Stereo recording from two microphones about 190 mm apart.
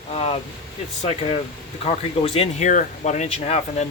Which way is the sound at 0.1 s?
30° left (ahead or behind).